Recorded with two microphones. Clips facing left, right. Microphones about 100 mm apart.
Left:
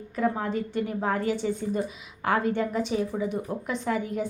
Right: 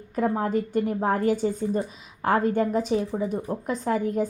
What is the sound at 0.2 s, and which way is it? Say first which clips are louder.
A woman's voice: right 3 dB; 40° right (ahead or behind).